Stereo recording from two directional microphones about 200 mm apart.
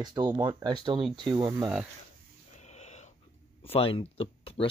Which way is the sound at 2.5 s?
35° left (ahead or behind).